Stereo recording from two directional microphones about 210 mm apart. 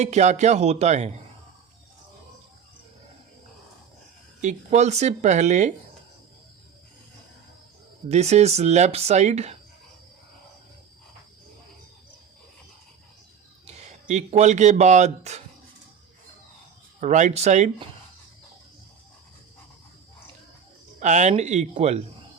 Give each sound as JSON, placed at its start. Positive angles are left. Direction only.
{"t": 0.0, "sound": "speech", "side_deg": -35}
{"t": 4.4, "sound": "speech", "side_deg": -35}
{"t": 8.1, "sound": "speech", "side_deg": -30}
{"t": 13.7, "sound": "speech", "side_deg": -35}
{"t": 17.0, "sound": "speech", "side_deg": -35}
{"t": 21.0, "sound": "speech", "side_deg": -35}